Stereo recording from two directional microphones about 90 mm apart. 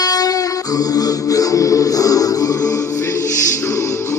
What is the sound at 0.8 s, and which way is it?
Music, 45° left (ahead or behind).